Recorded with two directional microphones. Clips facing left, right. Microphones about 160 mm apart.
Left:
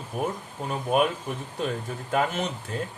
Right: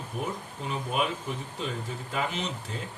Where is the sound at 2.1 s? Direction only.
50° left (ahead or behind).